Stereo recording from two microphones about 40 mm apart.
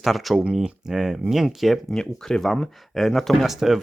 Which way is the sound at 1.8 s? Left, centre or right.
Centre.